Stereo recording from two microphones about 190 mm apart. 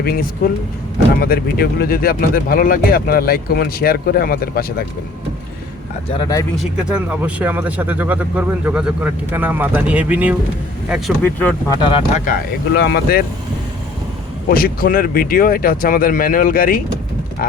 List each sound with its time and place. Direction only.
0.0 s speech: 55° left (ahead or behind)
6.1 s speech: 20° left (ahead or behind)
6.6 s speech: 5° right (ahead or behind)
11.3 s speech: 10° left (ahead or behind)
11.8 s speech: 25° left (ahead or behind)
12.2 s speech: 50° left (ahead or behind)
14.5 s speech: 50° left (ahead or behind)